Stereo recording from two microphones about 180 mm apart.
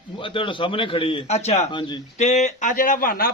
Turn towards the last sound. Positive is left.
turn(degrees=55)  # may be behind; listen again after turning